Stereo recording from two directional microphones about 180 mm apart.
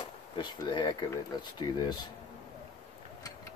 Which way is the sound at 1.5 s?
20° left (ahead or behind).